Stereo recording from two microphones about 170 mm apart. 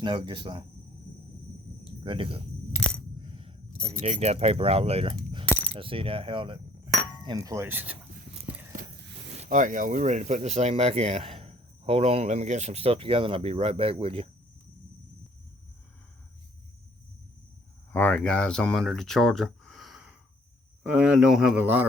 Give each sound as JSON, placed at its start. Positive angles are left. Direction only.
{"t": 0.0, "sound": "speech", "side_deg": -30}
{"t": 1.8, "sound": "cricket", "side_deg": -30}
{"t": 3.2, "sound": "speech", "side_deg": -30}
{"t": 5.6, "sound": "coin", "side_deg": -30}
{"t": 7.3, "sound": "speech", "side_deg": -20}
{"t": 9.3, "sound": "speech", "side_deg": -45}
{"t": 17.9, "sound": "speech", "side_deg": 10}